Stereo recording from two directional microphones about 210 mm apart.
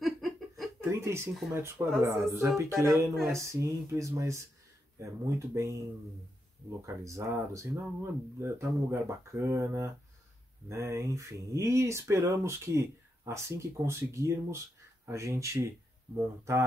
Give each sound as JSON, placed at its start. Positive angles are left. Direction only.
{"t": 0.0, "sound": "a sound", "side_deg": 0}
{"t": 0.7, "sound": "speech", "side_deg": -15}
{"t": 7.1, "sound": "speech", "side_deg": -15}